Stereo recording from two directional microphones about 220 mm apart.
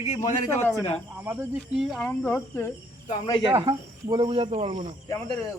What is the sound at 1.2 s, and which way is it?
Speech, 10° right (ahead or behind).